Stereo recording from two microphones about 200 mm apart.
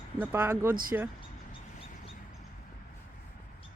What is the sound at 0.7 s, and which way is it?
Speech, 45° right (ahead or behind).